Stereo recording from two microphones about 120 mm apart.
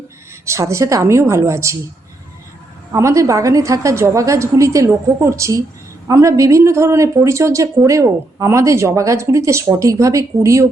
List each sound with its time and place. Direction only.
0.4 s speech: 25° right (ahead or behind)
2.9 s speech: 25° right (ahead or behind)